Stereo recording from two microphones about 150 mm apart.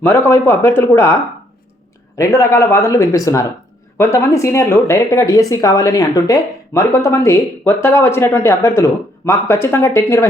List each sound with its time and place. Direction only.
0.0 s speech: 15° left (ahead or behind)
2.1 s speech: 20° left (ahead or behind)